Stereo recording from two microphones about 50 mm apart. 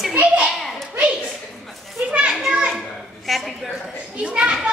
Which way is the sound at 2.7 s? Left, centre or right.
Centre.